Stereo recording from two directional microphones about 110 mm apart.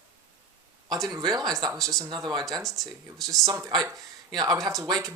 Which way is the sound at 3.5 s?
35° right (ahead or behind).